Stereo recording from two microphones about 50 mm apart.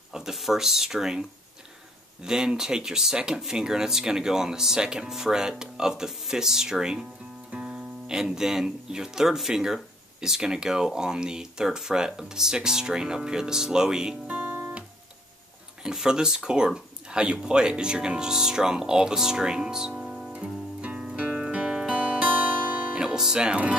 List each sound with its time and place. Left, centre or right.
0.1 s speech: centre
2.2 s speech: centre
14.2 s guitar: right
15.8 s speech: centre
20.0 s guitar: centre
20.8 s music: right
22.9 s music: centre